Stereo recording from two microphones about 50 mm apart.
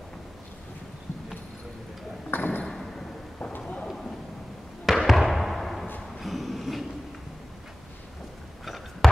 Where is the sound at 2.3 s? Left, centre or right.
Left.